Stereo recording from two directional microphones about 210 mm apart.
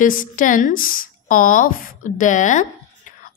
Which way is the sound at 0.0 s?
40° left (ahead or behind).